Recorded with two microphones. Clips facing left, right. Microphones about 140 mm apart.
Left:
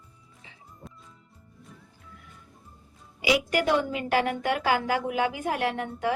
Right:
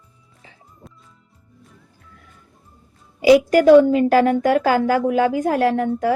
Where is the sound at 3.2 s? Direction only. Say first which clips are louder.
Right 12 dB; 40° right (ahead or behind).